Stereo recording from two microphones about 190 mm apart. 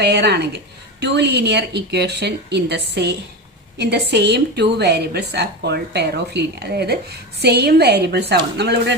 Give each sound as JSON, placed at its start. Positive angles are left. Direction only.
{"t": 0.0, "sound": "a woman's voice", "side_deg": -60}